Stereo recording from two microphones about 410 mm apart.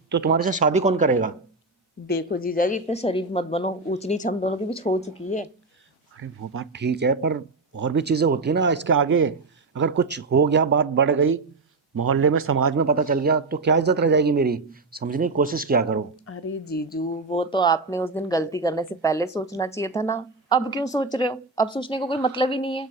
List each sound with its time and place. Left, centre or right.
0.1 s a man's voice: right
2.0 s speech: left
6.1 s a man's voice: right
16.2 s speech: left; by 22.9 s centre